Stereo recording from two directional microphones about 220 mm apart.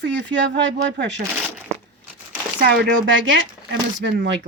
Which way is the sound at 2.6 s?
60° right (ahead or behind).